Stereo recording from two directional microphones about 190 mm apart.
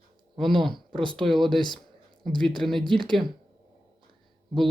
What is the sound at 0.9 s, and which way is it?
Speech, 25° right (ahead or behind).